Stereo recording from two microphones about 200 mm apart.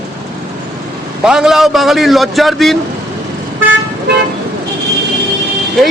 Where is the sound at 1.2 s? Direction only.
5° right (ahead or behind).